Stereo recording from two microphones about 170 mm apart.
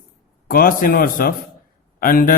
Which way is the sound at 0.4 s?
55° left (ahead or behind).